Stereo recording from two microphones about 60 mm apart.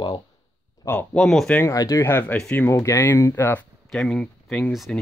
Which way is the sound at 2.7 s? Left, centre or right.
Left.